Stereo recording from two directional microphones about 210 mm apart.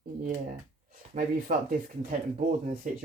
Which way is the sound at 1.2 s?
40° right (ahead or behind).